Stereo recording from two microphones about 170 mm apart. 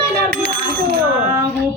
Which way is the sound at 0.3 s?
70° right (ahead or behind).